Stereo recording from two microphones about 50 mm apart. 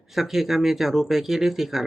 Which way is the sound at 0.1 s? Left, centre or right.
Centre.